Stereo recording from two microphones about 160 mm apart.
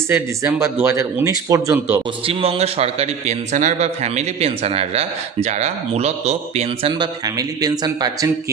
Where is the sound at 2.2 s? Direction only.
35° right (ahead or behind).